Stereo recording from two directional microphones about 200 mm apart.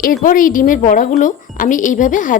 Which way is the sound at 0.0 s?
45° left (ahead or behind).